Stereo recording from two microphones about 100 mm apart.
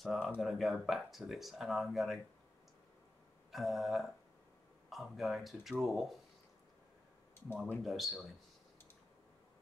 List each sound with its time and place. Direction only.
0.0 s speech: centre (ahead or behind)
3.5 s speech: 5° right (ahead or behind)
7.8 s speech: centre (ahead or behind)